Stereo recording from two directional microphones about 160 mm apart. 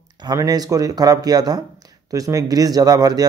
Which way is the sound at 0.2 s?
25° right (ahead or behind).